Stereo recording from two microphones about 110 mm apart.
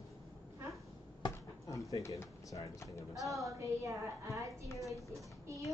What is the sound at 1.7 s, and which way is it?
Speech, 30° left (ahead or behind).